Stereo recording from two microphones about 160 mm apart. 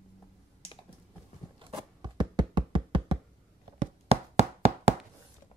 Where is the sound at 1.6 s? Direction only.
25° right (ahead or behind).